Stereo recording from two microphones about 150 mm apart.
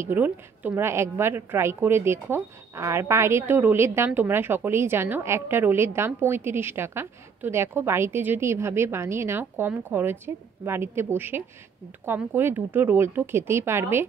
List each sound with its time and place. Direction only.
0.0 s a woman's voice: 10° right (ahead or behind)